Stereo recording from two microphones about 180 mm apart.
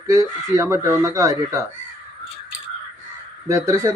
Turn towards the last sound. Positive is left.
turn(degrees=-15)  # may be behind; listen again after turning